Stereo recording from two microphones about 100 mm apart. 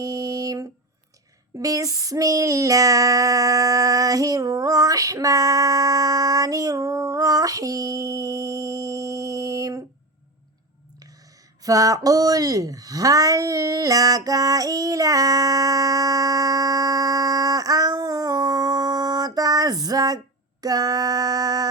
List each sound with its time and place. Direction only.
0.0 s a sound: 35° right (ahead or behind)
1.5 s child singing: 35° right (ahead or behind)
11.6 s speech: 35° right (ahead or behind)